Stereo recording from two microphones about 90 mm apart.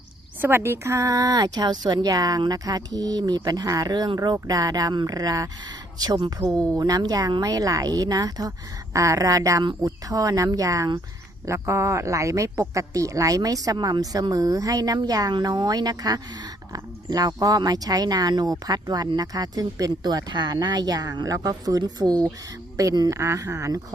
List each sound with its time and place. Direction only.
0.4 s a woman's voice: 25° right (ahead or behind)